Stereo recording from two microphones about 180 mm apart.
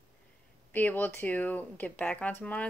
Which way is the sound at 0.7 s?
10° left (ahead or behind).